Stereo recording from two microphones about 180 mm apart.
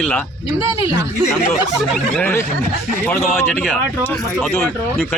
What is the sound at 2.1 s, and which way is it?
Speech, 10° left (ahead or behind).